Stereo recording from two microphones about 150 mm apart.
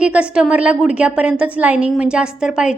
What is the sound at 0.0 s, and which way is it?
A woman's voice, 5° right (ahead or behind).